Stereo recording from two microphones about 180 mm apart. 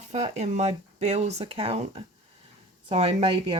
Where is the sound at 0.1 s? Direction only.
40° right (ahead or behind).